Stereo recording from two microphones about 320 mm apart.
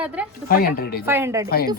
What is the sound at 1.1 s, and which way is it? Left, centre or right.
Speech, centre.